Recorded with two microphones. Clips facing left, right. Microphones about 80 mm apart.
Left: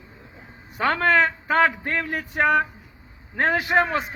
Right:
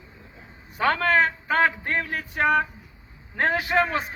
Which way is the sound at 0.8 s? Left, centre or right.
Left.